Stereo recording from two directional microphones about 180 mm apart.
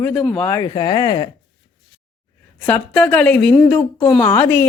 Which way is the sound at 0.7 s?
25° left (ahead or behind).